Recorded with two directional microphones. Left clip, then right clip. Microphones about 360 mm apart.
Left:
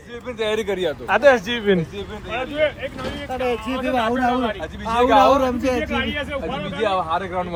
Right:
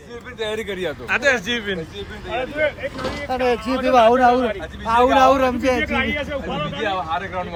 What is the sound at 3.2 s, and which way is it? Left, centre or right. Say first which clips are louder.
Speech: right 3 dB; right.